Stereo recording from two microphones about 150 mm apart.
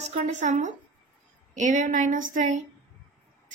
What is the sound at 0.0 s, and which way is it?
A woman's voice, 55° right (ahead or behind).